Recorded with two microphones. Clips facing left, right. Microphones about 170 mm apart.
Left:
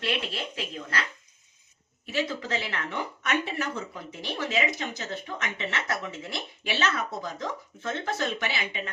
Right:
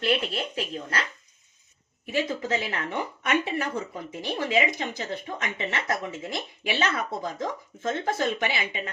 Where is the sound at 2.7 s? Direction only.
45° right (ahead or behind).